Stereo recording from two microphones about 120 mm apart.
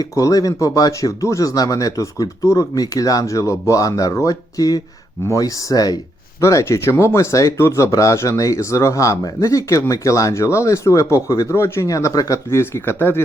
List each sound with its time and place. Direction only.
0.0 s speech: 30° left (ahead or behind)